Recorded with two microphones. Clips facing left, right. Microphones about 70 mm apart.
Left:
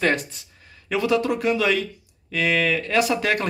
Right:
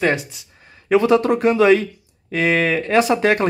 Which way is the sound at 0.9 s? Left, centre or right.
Right.